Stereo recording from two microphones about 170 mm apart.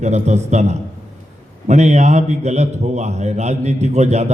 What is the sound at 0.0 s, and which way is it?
A man's voice, 40° right (ahead or behind).